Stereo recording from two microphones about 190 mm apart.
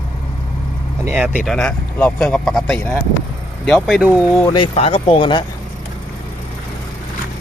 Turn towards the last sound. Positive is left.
turn(degrees=25)  # may be behind; listen again after turning